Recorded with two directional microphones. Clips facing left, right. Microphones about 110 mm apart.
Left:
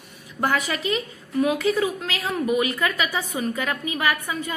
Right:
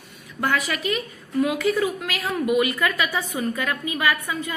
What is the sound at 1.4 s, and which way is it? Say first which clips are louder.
A woman's voice: left 1 dB; 15° left (ahead or behind).